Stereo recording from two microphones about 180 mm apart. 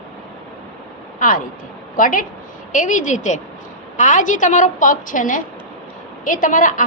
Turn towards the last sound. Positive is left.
turn(degrees=45)  # may be behind; listen again after turning